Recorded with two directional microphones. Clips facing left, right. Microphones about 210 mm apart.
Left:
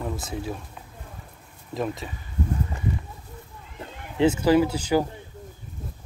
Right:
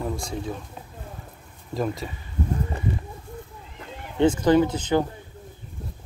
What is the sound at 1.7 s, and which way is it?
Speech, centre (ahead or behind).